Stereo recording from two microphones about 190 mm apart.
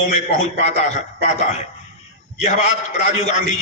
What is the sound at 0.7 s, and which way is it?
Speech, 35° left (ahead or behind).